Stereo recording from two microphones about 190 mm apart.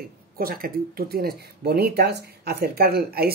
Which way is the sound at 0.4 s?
50° right (ahead or behind).